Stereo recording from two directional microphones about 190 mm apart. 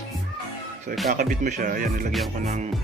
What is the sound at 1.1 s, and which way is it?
Speech, 40° right (ahead or behind).